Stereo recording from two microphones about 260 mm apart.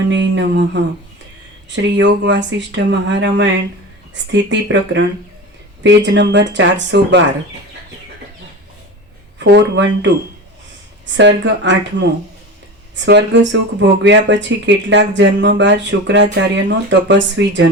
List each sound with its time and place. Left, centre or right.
0.1 s speech: right
9.4 s speech: right
11.2 s speech: right
13.1 s speech: right